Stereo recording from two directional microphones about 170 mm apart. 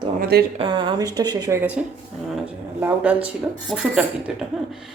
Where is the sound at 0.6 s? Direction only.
25° right (ahead or behind).